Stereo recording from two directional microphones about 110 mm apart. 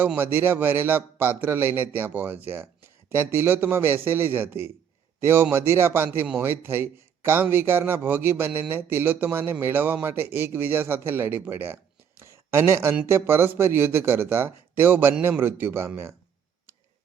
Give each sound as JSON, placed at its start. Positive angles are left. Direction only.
{"t": 0.0, "sound": "a man's voice", "side_deg": -15}
{"t": 12.2, "sound": "a sound", "side_deg": -25}
{"t": 13.1, "sound": "a man's voice", "side_deg": -20}